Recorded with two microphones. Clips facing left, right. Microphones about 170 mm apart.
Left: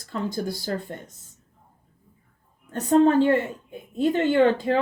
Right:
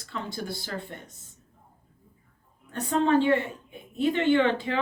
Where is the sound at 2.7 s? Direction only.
40° left (ahead or behind).